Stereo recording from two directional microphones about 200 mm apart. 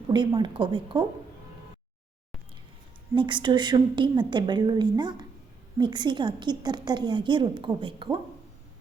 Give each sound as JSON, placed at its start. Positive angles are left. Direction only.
{"t": 0.1, "sound": "a woman's voice", "side_deg": -25}
{"t": 3.2, "sound": "a woman's voice", "side_deg": -25}